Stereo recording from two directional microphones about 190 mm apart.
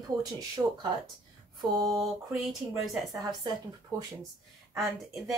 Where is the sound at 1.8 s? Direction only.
Centre (ahead or behind).